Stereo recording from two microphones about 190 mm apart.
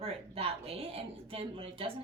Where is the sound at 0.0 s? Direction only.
30° right (ahead or behind).